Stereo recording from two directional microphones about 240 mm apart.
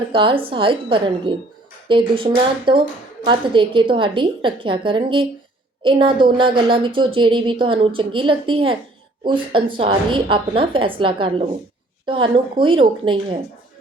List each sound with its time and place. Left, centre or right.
0.1 s speech: right